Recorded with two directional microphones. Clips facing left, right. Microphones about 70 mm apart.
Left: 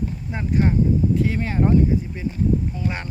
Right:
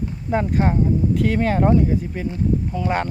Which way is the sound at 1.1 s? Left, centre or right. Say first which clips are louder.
Right 3 dB; right.